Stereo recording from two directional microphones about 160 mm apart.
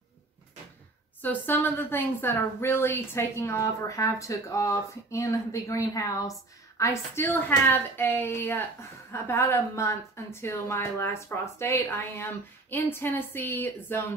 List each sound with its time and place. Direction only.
1.2 s a woman's voice: 10° left (ahead or behind)